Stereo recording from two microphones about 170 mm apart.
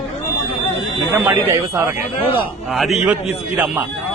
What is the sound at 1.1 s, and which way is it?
Speech, 10° right (ahead or behind).